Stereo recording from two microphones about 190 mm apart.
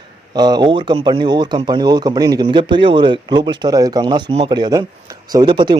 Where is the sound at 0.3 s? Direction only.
20° right (ahead or behind).